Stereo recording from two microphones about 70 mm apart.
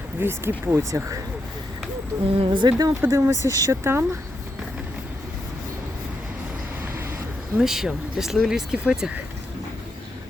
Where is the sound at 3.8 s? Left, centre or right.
Right.